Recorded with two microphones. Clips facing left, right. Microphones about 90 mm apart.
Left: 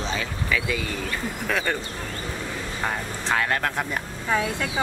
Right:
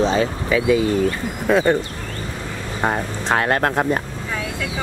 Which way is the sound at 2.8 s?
40° right (ahead or behind).